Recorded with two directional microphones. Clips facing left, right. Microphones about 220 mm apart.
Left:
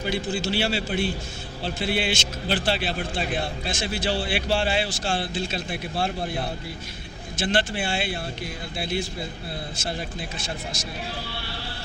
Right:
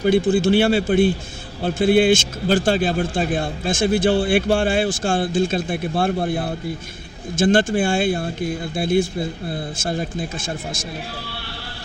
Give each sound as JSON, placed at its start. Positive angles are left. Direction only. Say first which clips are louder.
{"t": 0.0, "sound": "a man's voice", "louder": "right 11 dB", "side_deg": -55}
{"t": 7.3, "sound": "a man's voice", "louder": "right 9 dB", "side_deg": -45}